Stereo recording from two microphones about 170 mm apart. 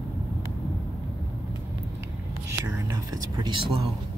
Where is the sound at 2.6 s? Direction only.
20° right (ahead or behind).